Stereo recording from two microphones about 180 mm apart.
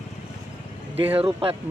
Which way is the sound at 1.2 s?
30° right (ahead or behind).